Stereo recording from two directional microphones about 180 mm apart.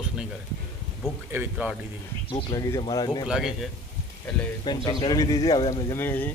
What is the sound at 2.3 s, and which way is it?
Speech, 20° left (ahead or behind).